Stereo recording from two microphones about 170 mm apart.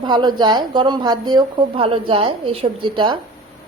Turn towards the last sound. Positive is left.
turn(degrees=-30)  # may be behind; listen again after turning